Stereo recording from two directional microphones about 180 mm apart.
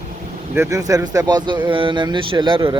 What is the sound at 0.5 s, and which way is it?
Speech, 15° right (ahead or behind).